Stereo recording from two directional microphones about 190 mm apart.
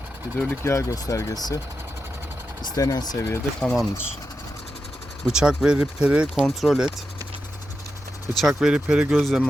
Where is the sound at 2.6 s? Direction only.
20° left (ahead or behind); by 3.9 s 5° left (ahead or behind).